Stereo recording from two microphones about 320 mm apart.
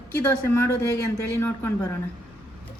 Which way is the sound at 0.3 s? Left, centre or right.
Centre.